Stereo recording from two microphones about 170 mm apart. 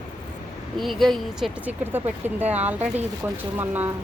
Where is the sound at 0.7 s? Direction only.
Centre (ahead or behind).